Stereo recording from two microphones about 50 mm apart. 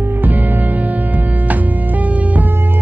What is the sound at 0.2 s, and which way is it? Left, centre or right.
Music, right.